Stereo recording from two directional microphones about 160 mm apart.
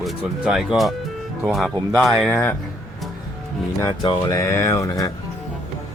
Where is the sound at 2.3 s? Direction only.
15° left (ahead or behind).